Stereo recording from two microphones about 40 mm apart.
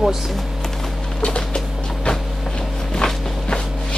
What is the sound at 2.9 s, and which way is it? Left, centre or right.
Walk, left.